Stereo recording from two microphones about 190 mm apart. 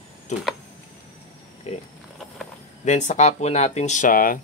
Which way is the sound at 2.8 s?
40° left (ahead or behind).